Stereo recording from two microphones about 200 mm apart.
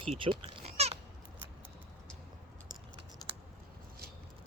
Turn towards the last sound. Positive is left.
turn(degrees=20)  # may be behind; listen again after turning